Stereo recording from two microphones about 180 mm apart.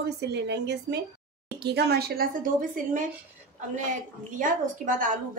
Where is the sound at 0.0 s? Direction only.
65° right (ahead or behind); by 3.1 s 45° right (ahead or behind).